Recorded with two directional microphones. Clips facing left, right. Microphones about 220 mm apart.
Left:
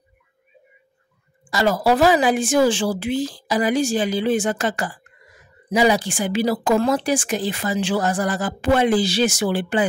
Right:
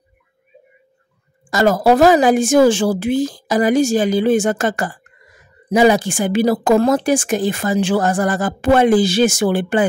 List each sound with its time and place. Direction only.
1.5 s speech: 45° right (ahead or behind)